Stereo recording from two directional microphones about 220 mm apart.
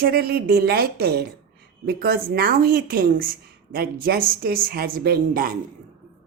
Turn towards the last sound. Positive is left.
turn(degrees=-40)  # may be behind; listen again after turning